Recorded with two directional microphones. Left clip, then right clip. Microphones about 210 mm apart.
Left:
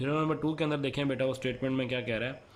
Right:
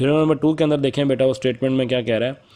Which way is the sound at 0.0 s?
30° right (ahead or behind).